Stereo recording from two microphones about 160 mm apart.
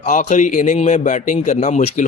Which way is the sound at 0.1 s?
50° left (ahead or behind).